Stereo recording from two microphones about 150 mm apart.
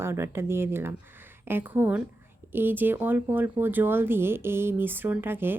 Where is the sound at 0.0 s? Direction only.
15° right (ahead or behind).